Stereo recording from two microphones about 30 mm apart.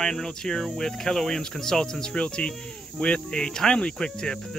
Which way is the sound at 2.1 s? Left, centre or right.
Left.